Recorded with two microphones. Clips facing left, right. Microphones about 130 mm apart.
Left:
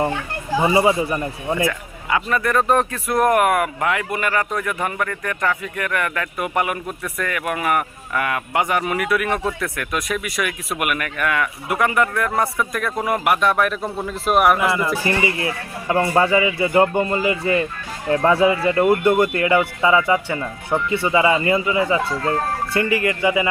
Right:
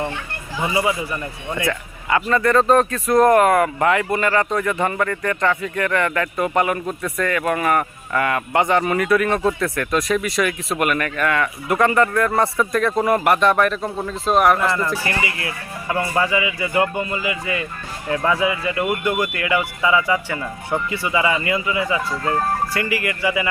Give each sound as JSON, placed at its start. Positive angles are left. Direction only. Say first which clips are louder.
{"t": 0.5, "sound": "speech", "louder": "left 5 dB", "side_deg": 30}
{"t": 2.0, "sound": "speech", "louder": "right 3 dB", "side_deg": 5}
{"t": 15.0, "sound": "speech", "louder": "left 4 dB", "side_deg": 25}
{"t": 17.0, "sound": "speech", "louder": "left 5 dB", "side_deg": 40}